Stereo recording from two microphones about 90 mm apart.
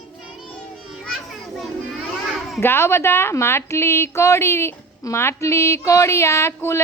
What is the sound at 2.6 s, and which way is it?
Music, 30° left (ahead or behind).